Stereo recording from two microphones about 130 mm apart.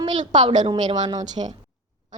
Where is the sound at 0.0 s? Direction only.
40° right (ahead or behind).